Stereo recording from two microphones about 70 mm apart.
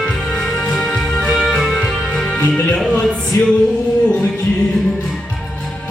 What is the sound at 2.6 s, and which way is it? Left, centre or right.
Choir, centre.